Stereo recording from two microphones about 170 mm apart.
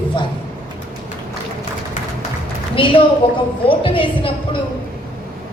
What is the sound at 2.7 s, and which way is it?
A woman's voice, 30° left (ahead or behind).